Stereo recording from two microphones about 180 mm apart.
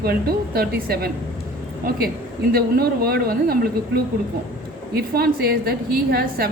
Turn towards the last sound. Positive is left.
turn(degrees=-60)  # may be behind; listen again after turning